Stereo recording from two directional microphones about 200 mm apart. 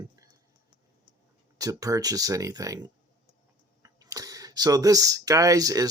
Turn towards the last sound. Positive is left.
turn(degrees=-15)  # may be behind; listen again after turning